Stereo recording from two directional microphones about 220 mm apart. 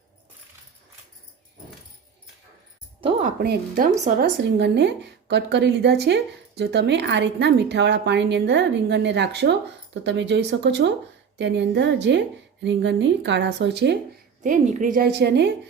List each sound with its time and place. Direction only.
3.0 s a woman's voice: 35° right (ahead or behind); by 14.0 s 50° right (ahead or behind)
14.4 s a woman's voice: 35° right (ahead or behind); by 15.5 s 50° right (ahead or behind)